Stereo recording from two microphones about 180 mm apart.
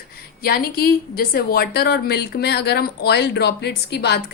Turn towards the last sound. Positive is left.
turn(degrees=65)  # may be behind; listen again after turning